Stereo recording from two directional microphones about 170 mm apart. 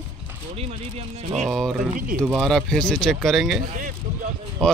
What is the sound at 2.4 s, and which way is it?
Speech, centre (ahead or behind).